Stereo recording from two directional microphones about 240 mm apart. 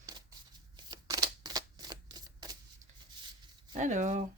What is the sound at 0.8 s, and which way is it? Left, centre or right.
Shuffling cards, centre.